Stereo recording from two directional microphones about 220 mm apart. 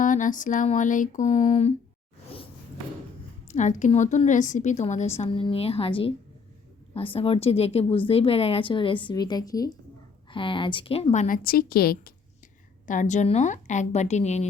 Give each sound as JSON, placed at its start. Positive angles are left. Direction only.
{"t": 0.0, "sound": "a woman's voice", "side_deg": 35}
{"t": 3.5, "sound": "a woman's voice", "side_deg": 35}